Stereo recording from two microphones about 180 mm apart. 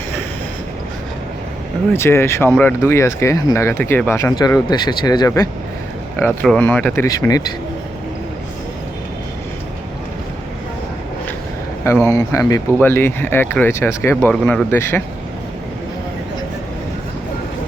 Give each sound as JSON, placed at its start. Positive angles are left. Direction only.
{"t": 1.9, "sound": "speech", "side_deg": 15}
{"t": 6.1, "sound": "speech", "side_deg": 10}
{"t": 11.9, "sound": "speech", "side_deg": 15}